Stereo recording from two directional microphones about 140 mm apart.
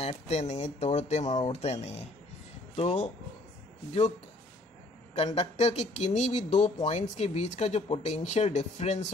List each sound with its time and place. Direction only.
0.0 s speech: 50° left (ahead or behind)
5.1 s speech: 50° left (ahead or behind)